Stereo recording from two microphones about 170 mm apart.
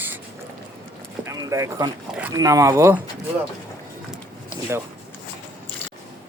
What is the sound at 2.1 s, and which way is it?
Speech, 10° right (ahead or behind).